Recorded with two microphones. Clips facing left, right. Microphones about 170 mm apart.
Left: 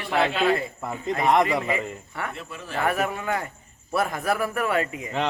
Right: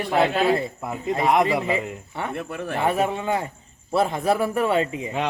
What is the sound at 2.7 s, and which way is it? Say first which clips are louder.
A man's voice: right 2 dB; 25° right (ahead or behind).